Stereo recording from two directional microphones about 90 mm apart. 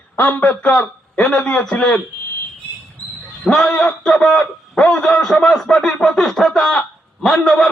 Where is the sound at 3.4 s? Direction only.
10° left (ahead or behind).